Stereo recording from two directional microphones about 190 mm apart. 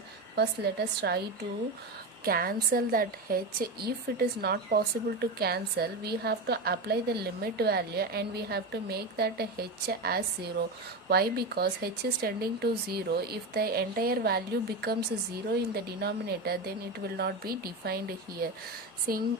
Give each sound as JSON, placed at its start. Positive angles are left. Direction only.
{"t": 0.3, "sound": "a woman's voice", "side_deg": -60}
{"t": 2.2, "sound": "a woman's voice", "side_deg": -50}